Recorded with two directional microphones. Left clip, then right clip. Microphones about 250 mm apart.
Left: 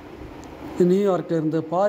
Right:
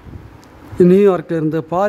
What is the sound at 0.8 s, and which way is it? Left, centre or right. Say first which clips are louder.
Speech: right 8 dB; right.